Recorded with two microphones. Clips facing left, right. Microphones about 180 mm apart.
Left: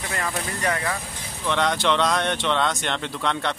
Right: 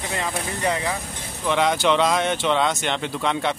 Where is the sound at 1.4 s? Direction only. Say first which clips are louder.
Right 3 dB; 5° right (ahead or behind).